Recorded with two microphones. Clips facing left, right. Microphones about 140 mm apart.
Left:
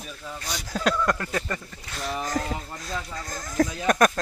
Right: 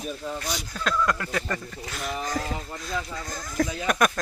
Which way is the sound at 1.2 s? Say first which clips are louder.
Even; 30° left (ahead or behind).